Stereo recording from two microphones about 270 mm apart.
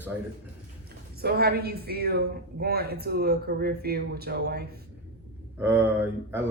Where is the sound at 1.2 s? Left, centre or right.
Right.